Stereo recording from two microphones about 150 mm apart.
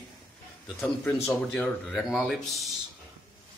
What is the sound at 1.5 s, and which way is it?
Speech, 5° left (ahead or behind).